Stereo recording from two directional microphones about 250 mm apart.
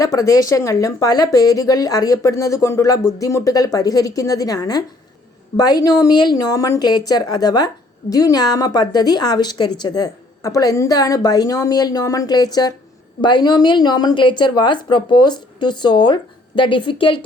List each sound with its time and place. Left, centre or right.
0.0 s a woman's voice: centre